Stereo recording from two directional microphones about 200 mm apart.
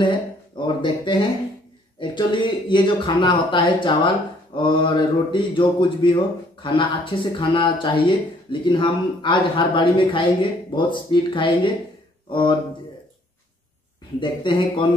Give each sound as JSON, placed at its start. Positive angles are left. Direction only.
{"t": 0.0, "sound": "speech", "side_deg": 25}
{"t": 14.2, "sound": "speech", "side_deg": 25}